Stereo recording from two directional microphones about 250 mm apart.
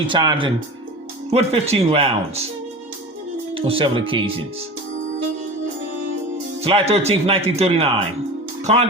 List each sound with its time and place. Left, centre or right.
0.1 s speech: centre
3.5 s speech: right
6.6 s speech: right